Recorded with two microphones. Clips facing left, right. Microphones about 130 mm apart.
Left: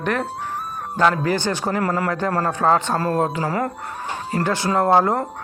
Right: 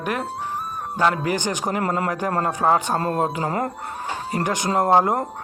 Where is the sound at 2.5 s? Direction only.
15° right (ahead or behind).